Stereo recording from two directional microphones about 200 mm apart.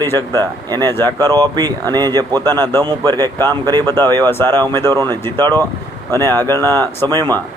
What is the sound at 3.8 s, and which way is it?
Speech, 10° left (ahead or behind).